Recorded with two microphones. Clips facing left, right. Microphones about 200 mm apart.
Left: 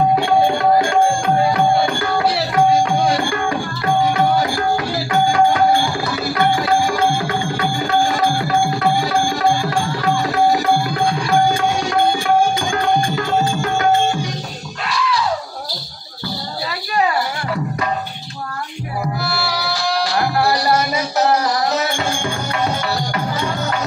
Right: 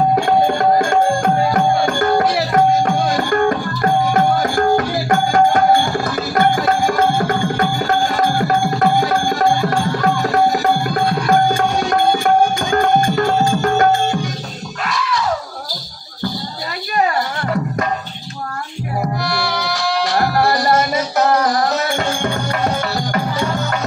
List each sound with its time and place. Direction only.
0.1 s music: 45° right (ahead or behind)
19.2 s music: 5° left (ahead or behind)
20.2 s music: 45° right (ahead or behind)